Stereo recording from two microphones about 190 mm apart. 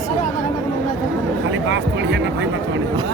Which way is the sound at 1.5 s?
70° right (ahead or behind).